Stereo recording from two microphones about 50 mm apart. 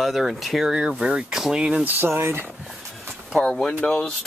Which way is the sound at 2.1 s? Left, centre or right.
Right.